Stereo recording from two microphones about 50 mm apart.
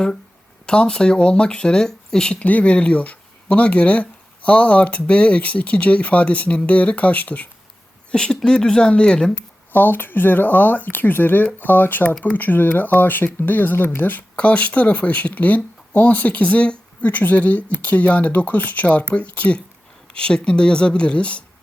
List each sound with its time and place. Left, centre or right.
0.6 s speech: centre
2.4 s speech: left
8.1 s speech: centre
9.7 s speech: left
14.3 s speech: left
20.1 s speech: centre